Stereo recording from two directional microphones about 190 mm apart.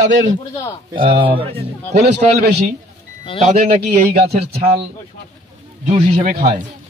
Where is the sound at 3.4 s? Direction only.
45° right (ahead or behind).